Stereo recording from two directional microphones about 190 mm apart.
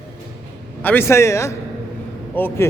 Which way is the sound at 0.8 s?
10° left (ahead or behind).